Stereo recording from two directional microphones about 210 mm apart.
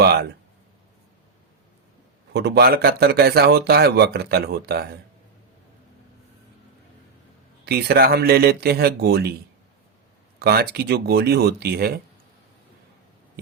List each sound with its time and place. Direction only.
0.0 s speech: 50° right (ahead or behind)
2.3 s speech: 50° right (ahead or behind)
7.6 s speech: 50° right (ahead or behind)
10.4 s speech: 50° right (ahead or behind)